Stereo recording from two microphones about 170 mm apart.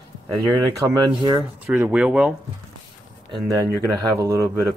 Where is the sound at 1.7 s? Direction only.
5° right (ahead or behind).